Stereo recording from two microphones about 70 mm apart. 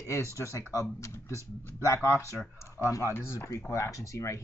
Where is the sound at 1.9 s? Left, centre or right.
Left.